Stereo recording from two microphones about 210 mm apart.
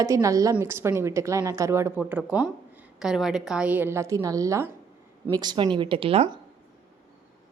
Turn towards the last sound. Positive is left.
turn(degrees=-25)  # may be behind; listen again after turning